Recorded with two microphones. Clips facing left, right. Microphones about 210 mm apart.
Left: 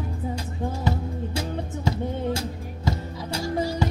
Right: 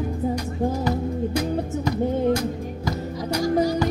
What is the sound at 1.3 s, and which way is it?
Music, 25° left (ahead or behind).